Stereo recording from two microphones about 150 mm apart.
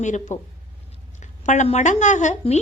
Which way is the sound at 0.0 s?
55° left (ahead or behind).